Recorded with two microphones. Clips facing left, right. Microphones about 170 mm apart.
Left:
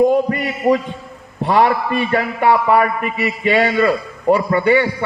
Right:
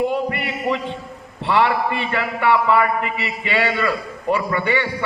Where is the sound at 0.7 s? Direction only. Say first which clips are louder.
Left 8 dB; 45° left (ahead or behind).